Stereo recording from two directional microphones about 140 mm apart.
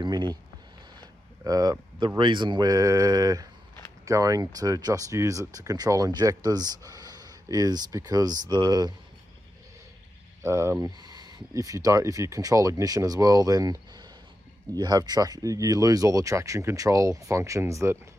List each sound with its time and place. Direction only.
0.0 s speech: 30° right (ahead or behind)
1.4 s speech: 25° right (ahead or behind)
10.4 s speech: 20° right (ahead or behind)